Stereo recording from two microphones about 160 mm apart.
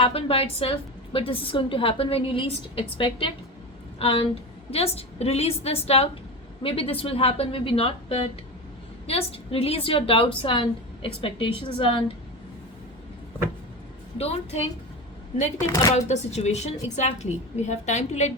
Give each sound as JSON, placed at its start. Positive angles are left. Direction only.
{"t": 0.0, "sound": "a woman's voice", "side_deg": 35}
{"t": 14.2, "sound": "a woman's voice", "side_deg": 40}
{"t": 15.6, "sound": "speech", "side_deg": 20}
{"t": 16.0, "sound": "a woman's voice", "side_deg": 45}